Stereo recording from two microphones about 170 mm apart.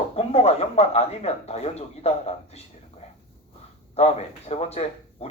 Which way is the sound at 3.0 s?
35° left (ahead or behind).